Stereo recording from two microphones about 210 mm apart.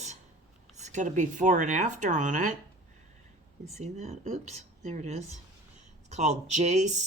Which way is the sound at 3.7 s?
30° right (ahead or behind).